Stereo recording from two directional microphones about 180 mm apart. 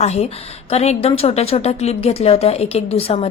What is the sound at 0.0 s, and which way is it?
A woman's voice, 35° left (ahead or behind).